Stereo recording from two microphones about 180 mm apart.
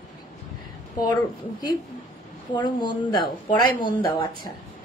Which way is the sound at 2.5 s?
25° left (ahead or behind).